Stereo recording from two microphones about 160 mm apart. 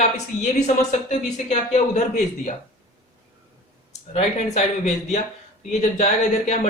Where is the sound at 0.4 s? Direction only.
50° left (ahead or behind).